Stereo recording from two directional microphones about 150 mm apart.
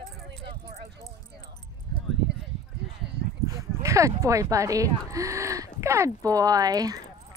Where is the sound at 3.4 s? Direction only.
20° left (ahead or behind).